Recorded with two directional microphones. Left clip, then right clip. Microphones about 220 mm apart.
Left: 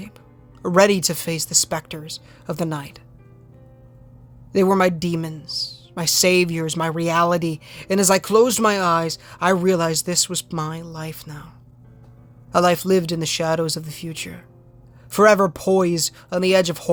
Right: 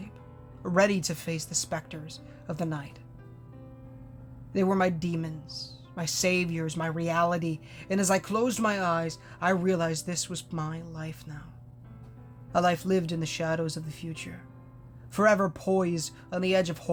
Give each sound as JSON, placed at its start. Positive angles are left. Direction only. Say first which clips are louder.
{"t": 0.6, "sound": "a woman's voice", "louder": "left 9 dB", "side_deg": 45}
{"t": 4.5, "sound": "a woman's voice", "louder": "left 9 dB", "side_deg": 45}